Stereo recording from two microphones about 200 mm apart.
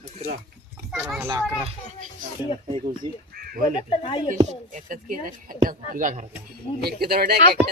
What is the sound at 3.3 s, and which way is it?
Bird, 45° right (ahead or behind).